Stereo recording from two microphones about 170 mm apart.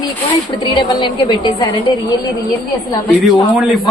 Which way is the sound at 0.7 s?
25° left (ahead or behind).